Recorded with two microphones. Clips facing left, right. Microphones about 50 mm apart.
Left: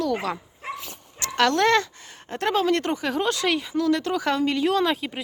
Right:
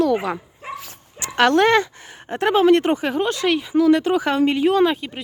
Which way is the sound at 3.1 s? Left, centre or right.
Centre.